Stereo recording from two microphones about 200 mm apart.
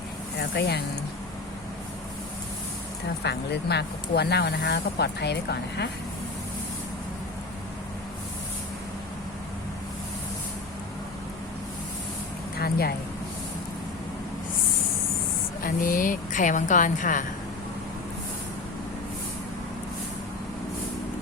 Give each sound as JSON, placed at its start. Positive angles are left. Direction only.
{"t": 0.3, "sound": "speech", "side_deg": 55}
{"t": 3.2, "sound": "speech", "side_deg": 55}
{"t": 12.5, "sound": "a sound", "side_deg": 50}
{"t": 15.6, "sound": "speech", "side_deg": 45}